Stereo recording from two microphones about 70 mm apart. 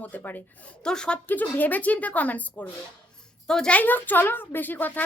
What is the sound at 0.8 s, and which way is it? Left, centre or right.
Speech, centre.